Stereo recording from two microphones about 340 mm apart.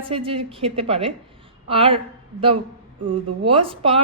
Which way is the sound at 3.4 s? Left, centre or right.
Centre.